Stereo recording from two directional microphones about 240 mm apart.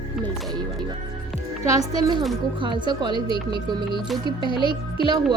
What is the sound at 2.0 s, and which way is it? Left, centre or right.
Speech, centre.